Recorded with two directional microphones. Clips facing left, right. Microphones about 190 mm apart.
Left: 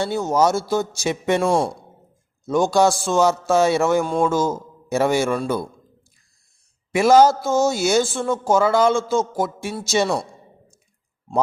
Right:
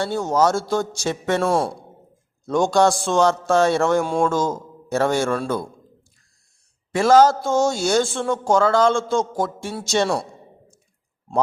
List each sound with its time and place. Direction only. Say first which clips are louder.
0.0 s speech: even; 10° left (ahead or behind)
1.5 s a man's voice: left 1 dB; 5° right (ahead or behind)
6.9 s speech: left 1 dB; 10° left (ahead or behind)